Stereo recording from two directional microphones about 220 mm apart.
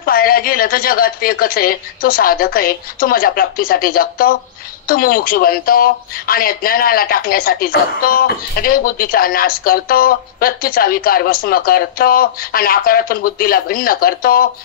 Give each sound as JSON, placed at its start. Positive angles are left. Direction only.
{"t": 0.0, "sound": "speech", "side_deg": 40}